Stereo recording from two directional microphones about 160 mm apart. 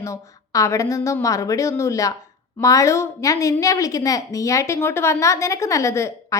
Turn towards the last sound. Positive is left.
turn(degrees=15)  # may be behind; listen again after turning